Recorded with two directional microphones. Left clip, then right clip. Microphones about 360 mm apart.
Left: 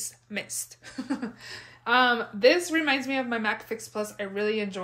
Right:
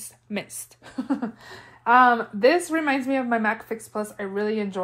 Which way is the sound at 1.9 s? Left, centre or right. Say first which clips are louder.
Right 5 dB; centre.